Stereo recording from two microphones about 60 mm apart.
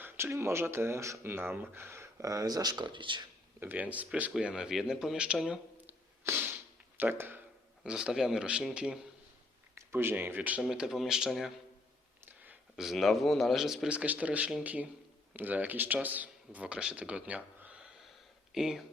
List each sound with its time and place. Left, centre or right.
0.0 s speech: right
1.3 s speech: right
2.2 s speech: right
3.6 s speech: right
4.5 s speech: centre
6.3 s a sound: right
6.9 s speech: right
7.9 s speech: centre
9.9 s speech: right
10.6 s speech: centre
12.2 s a sound: right
12.7 s speech: centre
13.8 s speech: right
18.5 s speech: centre